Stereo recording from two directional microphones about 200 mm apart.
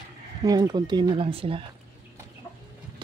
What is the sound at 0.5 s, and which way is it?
Speech, 20° right (ahead or behind).